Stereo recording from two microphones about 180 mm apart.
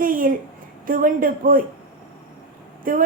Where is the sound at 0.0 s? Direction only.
50° right (ahead or behind).